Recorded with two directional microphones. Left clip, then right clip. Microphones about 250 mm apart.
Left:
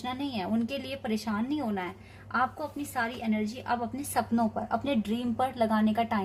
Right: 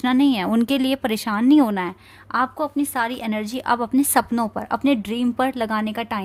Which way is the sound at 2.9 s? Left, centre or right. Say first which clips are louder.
Right 7 dB; right.